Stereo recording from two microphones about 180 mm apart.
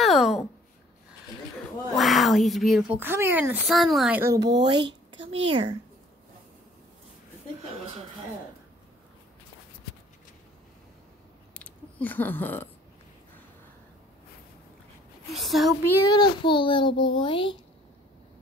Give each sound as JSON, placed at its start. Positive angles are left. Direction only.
{"t": 0.0, "sound": "speech", "side_deg": 0}
{"t": 2.0, "sound": "speech", "side_deg": 0}
{"t": 3.6, "sound": "speech", "side_deg": 0}
{"t": 4.2, "sound": "speech", "side_deg": -15}
{"t": 11.5, "sound": "a sound", "side_deg": 10}
{"t": 15.3, "sound": "speech", "side_deg": 0}
{"t": 16.1, "sound": "a child's voice", "side_deg": 25}